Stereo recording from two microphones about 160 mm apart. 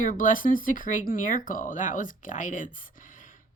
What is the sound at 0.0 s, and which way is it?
Speech, 55° left (ahead or behind).